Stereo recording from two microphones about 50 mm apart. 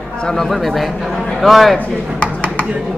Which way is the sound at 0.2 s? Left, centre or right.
Centre.